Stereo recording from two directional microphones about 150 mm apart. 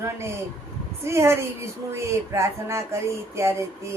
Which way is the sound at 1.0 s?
20° right (ahead or behind).